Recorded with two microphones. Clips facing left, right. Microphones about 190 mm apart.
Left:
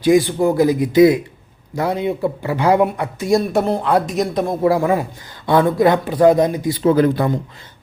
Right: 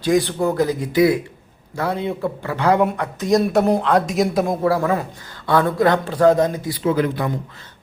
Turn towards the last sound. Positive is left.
turn(degrees=35)  # may be behind; listen again after turning